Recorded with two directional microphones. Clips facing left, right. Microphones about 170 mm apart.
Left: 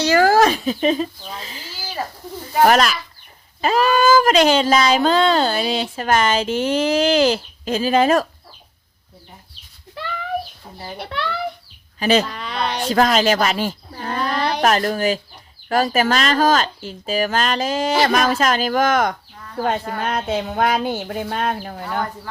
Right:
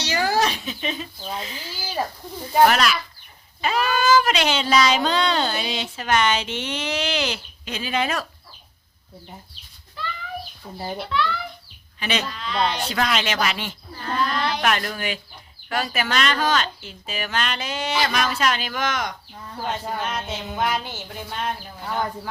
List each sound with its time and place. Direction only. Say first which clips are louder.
0.1 s a sound: left 7 dB; 50° left (ahead or behind)
2.6 s speech: left 4 dB; 40° left (ahead or behind)
9.9 s a sound: left 4 dB; 65° left (ahead or behind)
10.9 s speech: right 2 dB; 60° left (ahead or behind)
11.9 s speech: left 10 dB; 40° left (ahead or behind)
12.3 s speech: even; 55° left (ahead or behind)